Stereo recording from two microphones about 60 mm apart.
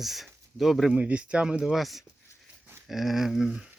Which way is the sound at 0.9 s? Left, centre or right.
Right.